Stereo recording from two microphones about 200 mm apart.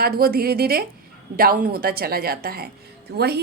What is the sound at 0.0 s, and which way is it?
A woman's voice, 50° right (ahead or behind).